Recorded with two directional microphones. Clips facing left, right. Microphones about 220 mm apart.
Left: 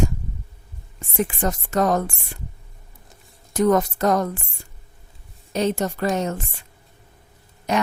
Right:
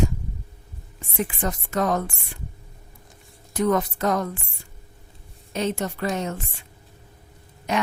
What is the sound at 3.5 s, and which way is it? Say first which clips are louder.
Speech: left 4 dB; 45° left (ahead or behind).